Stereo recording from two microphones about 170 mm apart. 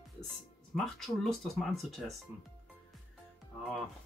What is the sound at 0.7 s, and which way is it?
Speech, centre (ahead or behind).